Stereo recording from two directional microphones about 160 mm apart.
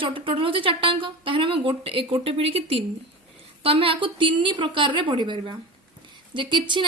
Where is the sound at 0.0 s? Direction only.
35° right (ahead or behind).